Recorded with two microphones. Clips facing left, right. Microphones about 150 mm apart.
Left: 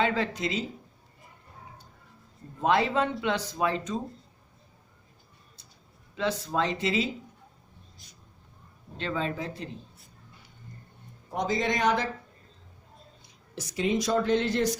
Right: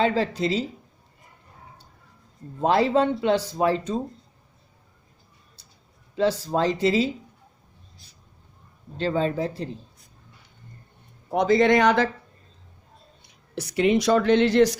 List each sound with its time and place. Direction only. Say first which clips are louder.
0.0 s speech: right 5 dB; 30° right (ahead or behind)
2.6 s speech: right 5 dB; 30° right (ahead or behind)
5.6 s a sound: even; 30° right (ahead or behind)
6.1 s speech: right 6 dB; 30° right (ahead or behind)
9.0 s speech: right 7 dB; 35° right (ahead or behind)
11.3 s speech: right 10 dB; 65° right (ahead or behind)
13.2 s speech: right 7 dB; 65° right (ahead or behind)